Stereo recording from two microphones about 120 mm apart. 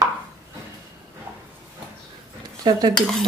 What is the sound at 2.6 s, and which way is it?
Cutlery, 35° right (ahead or behind).